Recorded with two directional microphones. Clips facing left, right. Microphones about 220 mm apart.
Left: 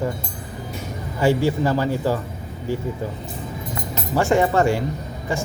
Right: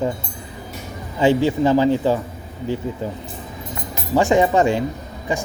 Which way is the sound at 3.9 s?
15° right (ahead or behind).